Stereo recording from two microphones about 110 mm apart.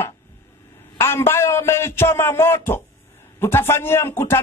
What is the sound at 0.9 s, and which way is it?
A man's voice, 20° left (ahead or behind).